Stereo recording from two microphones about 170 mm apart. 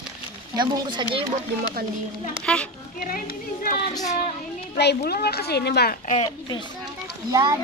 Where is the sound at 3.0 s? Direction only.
60° left (ahead or behind).